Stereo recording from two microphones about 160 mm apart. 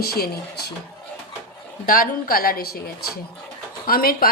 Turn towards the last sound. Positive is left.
turn(degrees=65)  # may be behind; listen again after turning